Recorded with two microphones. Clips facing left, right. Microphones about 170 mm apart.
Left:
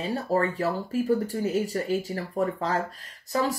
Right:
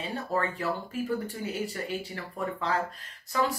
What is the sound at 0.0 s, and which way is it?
Speech, 40° left (ahead or behind).